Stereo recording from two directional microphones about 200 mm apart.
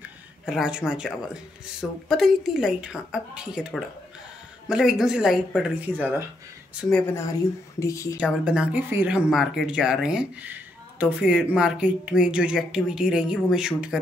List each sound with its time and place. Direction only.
0.5 s speech: 5° right (ahead or behind); by 8.2 s 15° left (ahead or behind)
8.5 s speech: 5° right (ahead or behind)